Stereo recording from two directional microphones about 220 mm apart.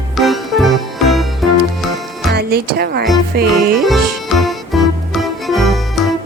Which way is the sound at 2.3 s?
45° right (ahead or behind).